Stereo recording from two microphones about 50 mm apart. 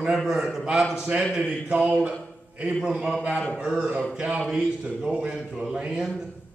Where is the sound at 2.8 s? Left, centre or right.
Centre.